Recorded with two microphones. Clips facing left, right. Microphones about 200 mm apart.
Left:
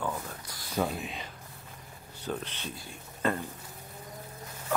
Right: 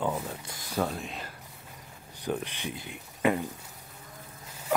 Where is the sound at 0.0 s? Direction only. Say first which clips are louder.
Right 4 dB; 20° right (ahead or behind).